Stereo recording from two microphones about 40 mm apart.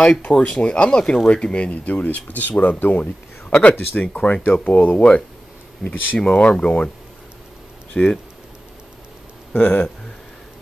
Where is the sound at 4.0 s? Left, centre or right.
Left.